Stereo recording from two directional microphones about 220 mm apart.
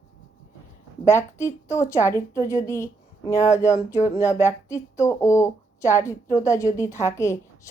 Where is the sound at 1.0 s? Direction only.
15° left (ahead or behind).